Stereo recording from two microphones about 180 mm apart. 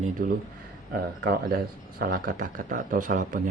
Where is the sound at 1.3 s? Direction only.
55° right (ahead or behind).